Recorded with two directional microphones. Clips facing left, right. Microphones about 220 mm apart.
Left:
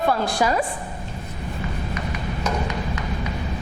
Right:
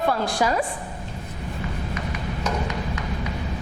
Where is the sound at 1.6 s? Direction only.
15° left (ahead or behind).